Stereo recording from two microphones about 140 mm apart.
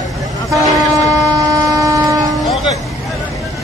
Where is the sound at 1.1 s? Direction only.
25° right (ahead or behind).